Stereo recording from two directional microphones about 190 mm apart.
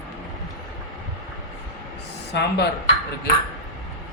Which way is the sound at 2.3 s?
60° left (ahead or behind).